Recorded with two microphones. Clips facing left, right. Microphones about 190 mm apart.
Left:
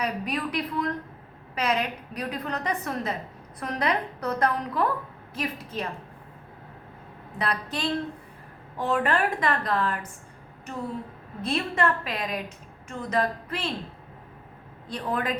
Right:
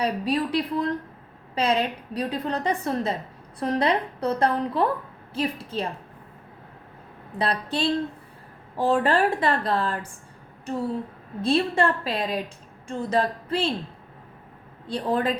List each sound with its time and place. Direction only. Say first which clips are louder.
0.0 s a woman's voice: right 5 dB; 30° right (ahead or behind)
7.3 s a woman's voice: right 4 dB; 30° right (ahead or behind)
11.4 s a woman's voice: right 4 dB; 30° right (ahead or behind)
14.8 s a woman's voice: right 5 dB; 30° right (ahead or behind)